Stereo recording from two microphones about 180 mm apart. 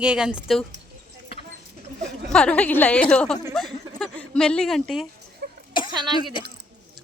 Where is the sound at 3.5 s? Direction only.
Centre (ahead or behind).